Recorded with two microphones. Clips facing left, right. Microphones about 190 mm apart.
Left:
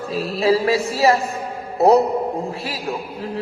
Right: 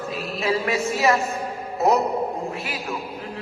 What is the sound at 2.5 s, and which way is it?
Speech, 35° left (ahead or behind).